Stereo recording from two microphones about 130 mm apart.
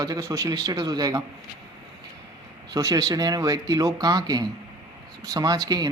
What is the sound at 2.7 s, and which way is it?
A man's voice, 25° right (ahead or behind).